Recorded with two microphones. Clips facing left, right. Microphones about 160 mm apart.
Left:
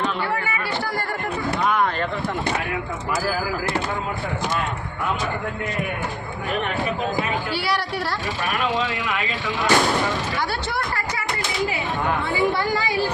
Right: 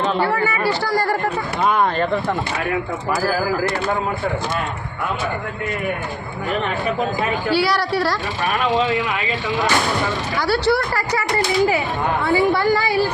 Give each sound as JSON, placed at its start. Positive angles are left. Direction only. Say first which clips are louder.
{"t": 0.2, "sound": "speech", "louder": "right 6 dB", "side_deg": -80}
{"t": 7.5, "sound": "speech", "louder": "right 6 dB", "side_deg": -90}
{"t": 10.3, "sound": "speech", "louder": "right 8 dB", "side_deg": -90}